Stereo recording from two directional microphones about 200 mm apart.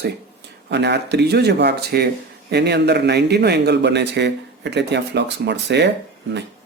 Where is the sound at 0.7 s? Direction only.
60° right (ahead or behind).